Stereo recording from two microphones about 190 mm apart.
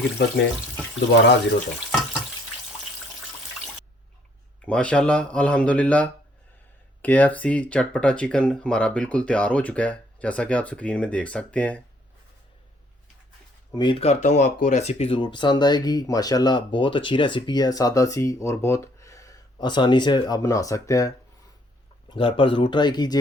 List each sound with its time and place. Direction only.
0.2 s speech: 65° left (ahead or behind)
4.6 s speech: 5° left (ahead or behind)
13.7 s speech: 25° left (ahead or behind)
22.1 s speech: 25° left (ahead or behind)